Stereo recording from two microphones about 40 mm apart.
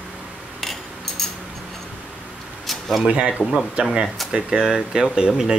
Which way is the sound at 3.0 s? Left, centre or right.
Right.